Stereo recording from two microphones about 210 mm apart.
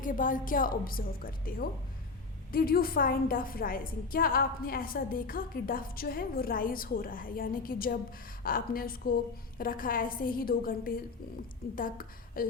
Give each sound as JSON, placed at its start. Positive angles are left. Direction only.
{"t": 0.0, "sound": "a woman's voice", "side_deg": 40}